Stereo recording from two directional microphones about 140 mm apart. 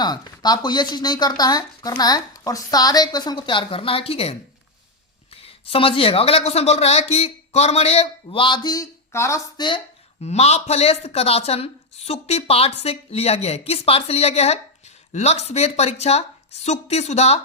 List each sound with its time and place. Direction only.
0.0 s a woman's voice: 30° left (ahead or behind)
9.6 s speech: 35° left (ahead or behind)
10.2 s speech: 50° left (ahead or behind)